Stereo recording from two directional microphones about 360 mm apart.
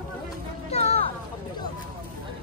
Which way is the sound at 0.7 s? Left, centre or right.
Centre.